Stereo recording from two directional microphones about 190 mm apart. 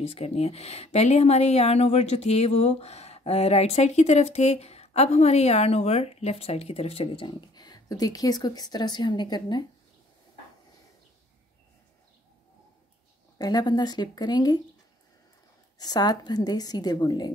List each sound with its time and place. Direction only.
0.0 s speech: 30° left (ahead or behind)
13.4 s a woman's voice: 20° left (ahead or behind)
15.8 s a woman's voice: 20° left (ahead or behind)